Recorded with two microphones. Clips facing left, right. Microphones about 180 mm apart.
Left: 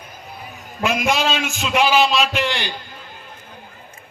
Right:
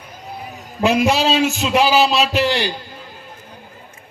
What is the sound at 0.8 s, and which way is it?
A man's voice, 35° right (ahead or behind).